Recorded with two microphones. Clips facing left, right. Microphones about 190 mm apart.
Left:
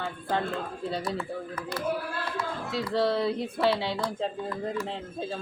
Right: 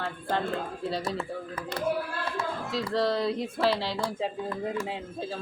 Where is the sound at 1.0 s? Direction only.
25° right (ahead or behind).